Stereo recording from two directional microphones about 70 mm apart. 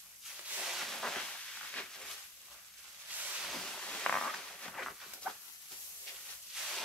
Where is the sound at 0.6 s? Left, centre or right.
Centre.